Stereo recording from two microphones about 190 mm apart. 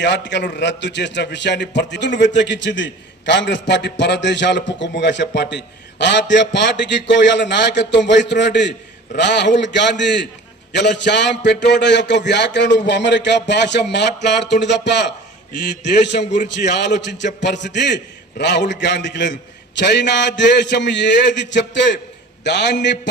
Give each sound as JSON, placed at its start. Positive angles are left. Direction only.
{"t": 0.0, "sound": "a man's voice", "side_deg": 65}
{"t": 16.6, "sound": "a man's voice", "side_deg": 65}